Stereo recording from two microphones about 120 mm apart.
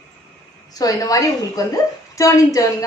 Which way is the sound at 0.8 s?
30° left (ahead or behind).